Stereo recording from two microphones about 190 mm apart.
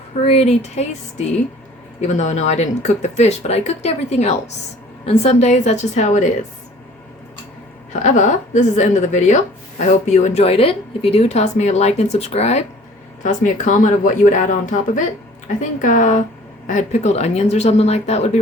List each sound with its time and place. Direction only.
0.1 s speech: 30° left (ahead or behind)
8.0 s speech: 40° left (ahead or behind)